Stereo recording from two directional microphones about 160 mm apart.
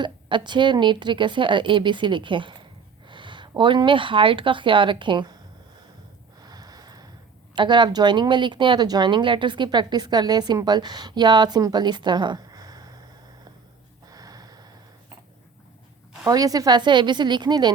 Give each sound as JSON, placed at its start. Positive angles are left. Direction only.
{"t": 0.0, "sound": "speech", "side_deg": -30}
{"t": 6.4, "sound": "a sound", "side_deg": -25}
{"t": 7.5, "sound": "speech", "side_deg": -30}
{"t": 14.1, "sound": "snort", "side_deg": -25}
{"t": 16.2, "sound": "speech", "side_deg": -25}